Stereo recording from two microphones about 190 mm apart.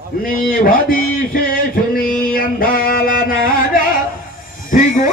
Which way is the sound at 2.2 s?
50° left (ahead or behind).